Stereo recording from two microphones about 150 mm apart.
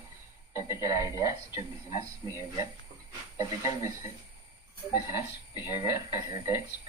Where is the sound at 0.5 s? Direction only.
20° right (ahead or behind).